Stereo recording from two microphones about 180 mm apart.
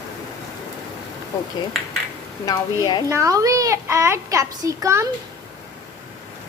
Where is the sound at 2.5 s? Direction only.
20° left (ahead or behind).